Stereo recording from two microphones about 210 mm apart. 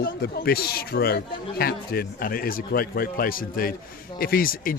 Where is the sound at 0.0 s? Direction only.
45° left (ahead or behind).